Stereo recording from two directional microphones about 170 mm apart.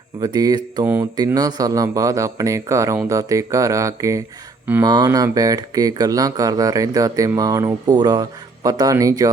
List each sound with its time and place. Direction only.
0.2 s speech: 20° right (ahead or behind)
4.9 s speech: 20° right (ahead or behind)